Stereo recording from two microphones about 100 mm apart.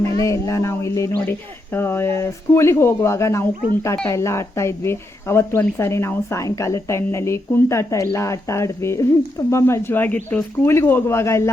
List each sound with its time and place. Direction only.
0.0 s speech: 30° left (ahead or behind)